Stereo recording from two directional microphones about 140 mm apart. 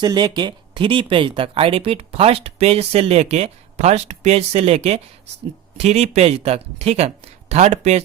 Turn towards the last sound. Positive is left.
turn(degrees=-50)  # may be behind; listen again after turning